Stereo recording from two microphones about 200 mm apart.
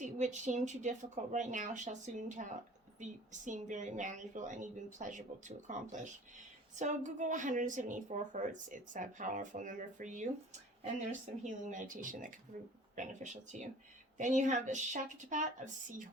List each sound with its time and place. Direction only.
0.0 s a woman's voice: 35° right (ahead or behind)
11.4 s a woman's voice: 40° right (ahead or behind)